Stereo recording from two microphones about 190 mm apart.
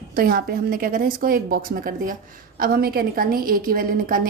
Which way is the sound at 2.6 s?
50° right (ahead or behind).